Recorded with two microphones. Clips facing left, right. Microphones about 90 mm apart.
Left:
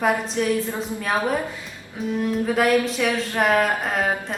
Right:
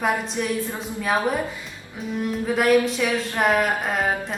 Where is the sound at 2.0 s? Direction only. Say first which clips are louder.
Left 3 dB; centre (ahead or behind).